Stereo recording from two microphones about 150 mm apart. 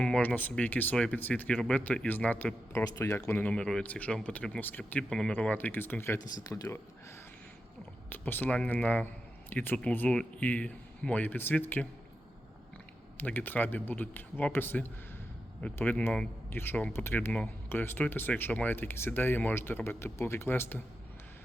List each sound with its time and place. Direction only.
0.0 s speech: 5° left (ahead or behind)
8.1 s speech: 10° left (ahead or behind)
13.1 s speech: 10° left (ahead or behind)